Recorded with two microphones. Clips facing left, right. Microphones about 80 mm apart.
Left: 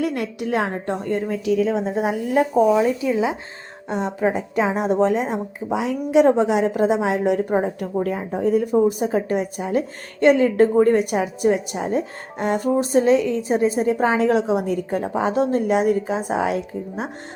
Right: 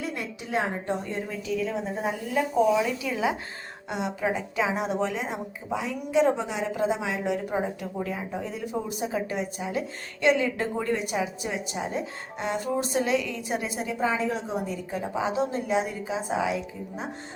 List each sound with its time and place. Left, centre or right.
0.0 s a woman's voice: left
1.5 s a woman's voice: left
2.3 s speech: left
2.7 s speech: left
3.1 s speech: left
3.8 s speech: left
5.7 s a woman's voice: left
14.0 s a woman's voice: left